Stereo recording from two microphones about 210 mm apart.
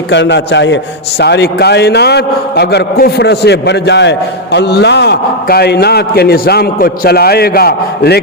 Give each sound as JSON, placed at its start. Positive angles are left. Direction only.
{"t": 0.1, "sound": "a man's voice", "side_deg": 55}